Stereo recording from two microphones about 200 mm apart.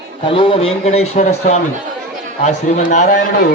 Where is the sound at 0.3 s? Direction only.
25° left (ahead or behind).